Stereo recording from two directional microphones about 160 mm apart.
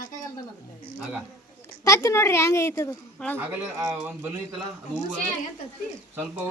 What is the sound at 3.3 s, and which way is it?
Speech, 20° right (ahead or behind).